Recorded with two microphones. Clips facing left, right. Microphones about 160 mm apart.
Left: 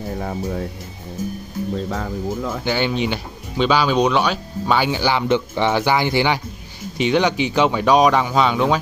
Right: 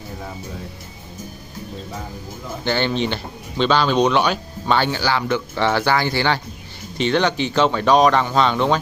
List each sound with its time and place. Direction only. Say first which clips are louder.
0.2 s speech: left 8 dB; 55° left (ahead or behind)
1.9 s speech: left 8 dB; 90° left
2.6 s speech: right 2 dB; 10° left (ahead or behind)